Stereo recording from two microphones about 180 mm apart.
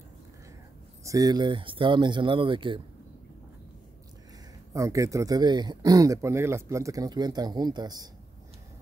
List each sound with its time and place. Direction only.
1.0 s speech: 20° right (ahead or behind)
4.7 s speech: 15° right (ahead or behind)